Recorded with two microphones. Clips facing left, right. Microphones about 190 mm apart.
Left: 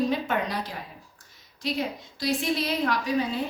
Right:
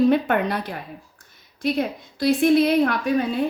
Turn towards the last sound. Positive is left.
turn(degrees=-55)  # may be behind; listen again after turning